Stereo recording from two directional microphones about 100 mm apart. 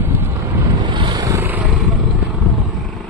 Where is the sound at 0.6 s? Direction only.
50° right (ahead or behind).